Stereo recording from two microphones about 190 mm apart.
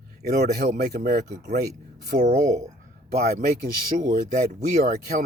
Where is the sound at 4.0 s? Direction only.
45° right (ahead or behind).